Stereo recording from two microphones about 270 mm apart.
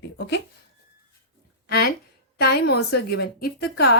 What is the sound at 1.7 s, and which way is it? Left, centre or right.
Speech, left.